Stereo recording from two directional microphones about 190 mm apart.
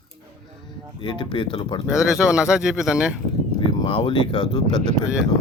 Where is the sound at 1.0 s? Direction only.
25° left (ahead or behind).